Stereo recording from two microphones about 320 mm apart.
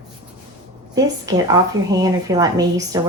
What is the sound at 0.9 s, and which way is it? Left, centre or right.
Speech, centre.